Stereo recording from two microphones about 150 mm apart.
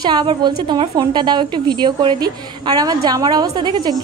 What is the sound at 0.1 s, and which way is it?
A woman's voice, 30° right (ahead or behind).